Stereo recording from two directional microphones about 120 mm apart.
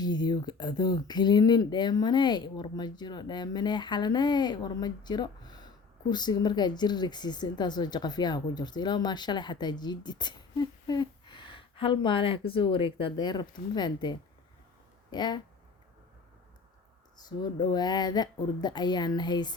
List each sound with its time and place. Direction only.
0.0 s speech: 35° left (ahead or behind)
17.2 s speech: 35° left (ahead or behind)